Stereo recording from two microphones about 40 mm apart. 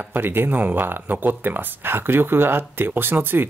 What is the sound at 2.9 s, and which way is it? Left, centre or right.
Speech, right.